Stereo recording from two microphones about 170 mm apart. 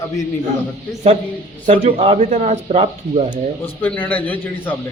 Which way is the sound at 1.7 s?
40° right (ahead or behind).